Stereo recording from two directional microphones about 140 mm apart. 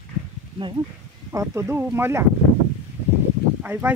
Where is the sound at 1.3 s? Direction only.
20° right (ahead or behind).